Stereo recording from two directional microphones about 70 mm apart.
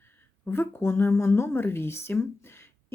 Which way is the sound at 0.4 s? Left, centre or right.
Left.